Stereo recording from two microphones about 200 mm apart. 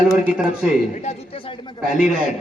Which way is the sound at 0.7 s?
35° left (ahead or behind).